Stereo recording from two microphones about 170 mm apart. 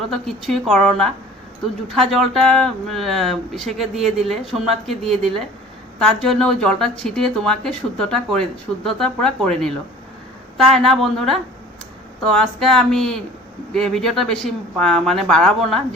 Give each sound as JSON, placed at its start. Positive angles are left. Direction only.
{"t": 0.1, "sound": "speech", "side_deg": 0}
{"t": 10.8, "sound": "speech", "side_deg": 0}